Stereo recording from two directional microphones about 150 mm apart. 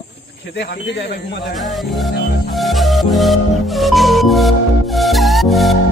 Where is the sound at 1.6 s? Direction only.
Centre (ahead or behind).